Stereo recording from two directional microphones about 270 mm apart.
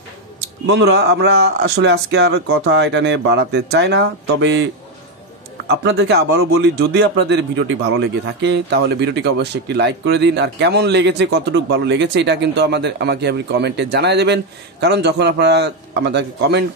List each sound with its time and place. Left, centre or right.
0.7 s speech: right
5.9 s speech: right